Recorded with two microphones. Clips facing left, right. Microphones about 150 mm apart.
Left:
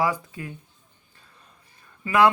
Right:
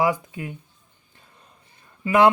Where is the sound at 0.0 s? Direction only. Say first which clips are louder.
Right 3 dB; 15° right (ahead or behind).